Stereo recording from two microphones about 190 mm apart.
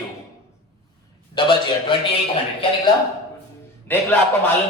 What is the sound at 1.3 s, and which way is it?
Speech, 25° left (ahead or behind).